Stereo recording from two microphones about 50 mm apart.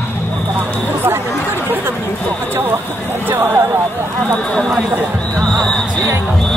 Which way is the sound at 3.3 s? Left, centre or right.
Right.